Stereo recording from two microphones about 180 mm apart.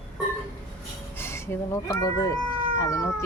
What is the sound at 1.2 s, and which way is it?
Speech, 15° left (ahead or behind).